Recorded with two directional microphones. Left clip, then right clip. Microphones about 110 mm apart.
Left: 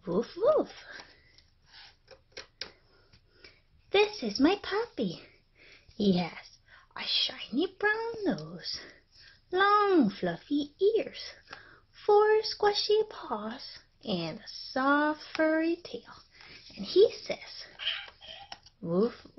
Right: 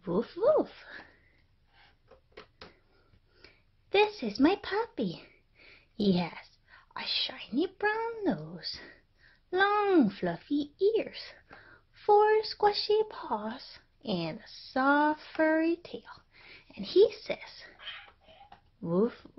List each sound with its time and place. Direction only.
0.0 s a sound: 30° right (ahead or behind)
3.4 s a sound: 25° right (ahead or behind)
4.7 s speech: 25° right (ahead or behind)
6.9 s whispering: 30° right (ahead or behind)
7.2 s speech: 25° right (ahead or behind)
18.8 s speech: 30° right (ahead or behind)